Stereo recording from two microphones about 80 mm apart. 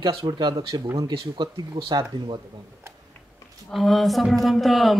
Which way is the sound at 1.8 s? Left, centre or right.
Right.